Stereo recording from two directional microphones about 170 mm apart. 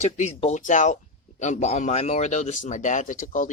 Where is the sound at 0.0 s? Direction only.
40° left (ahead or behind).